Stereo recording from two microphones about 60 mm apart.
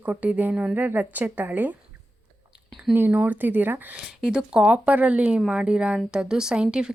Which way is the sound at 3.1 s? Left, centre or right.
Right.